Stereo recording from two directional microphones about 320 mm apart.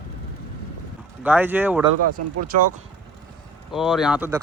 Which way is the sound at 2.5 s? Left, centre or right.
Right.